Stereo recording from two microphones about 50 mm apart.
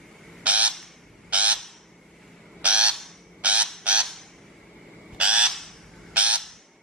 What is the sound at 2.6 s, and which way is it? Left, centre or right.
Crow, right.